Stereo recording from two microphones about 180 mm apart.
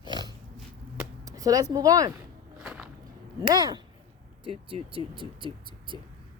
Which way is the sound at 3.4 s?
25° right (ahead or behind).